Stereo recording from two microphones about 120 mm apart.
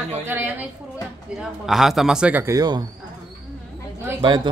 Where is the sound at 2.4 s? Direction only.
35° right (ahead or behind).